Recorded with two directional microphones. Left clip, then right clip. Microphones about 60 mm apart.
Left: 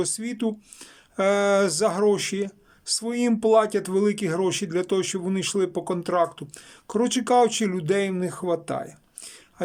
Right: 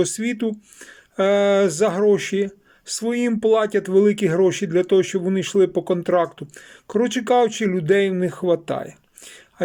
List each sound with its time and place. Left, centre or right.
0.0 s speech: centre
1.2 s speech: centre